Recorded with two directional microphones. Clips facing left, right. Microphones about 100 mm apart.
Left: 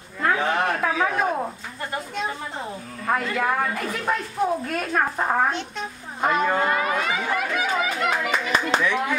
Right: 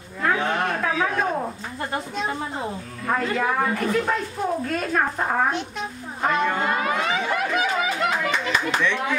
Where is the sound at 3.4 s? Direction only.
5° left (ahead or behind).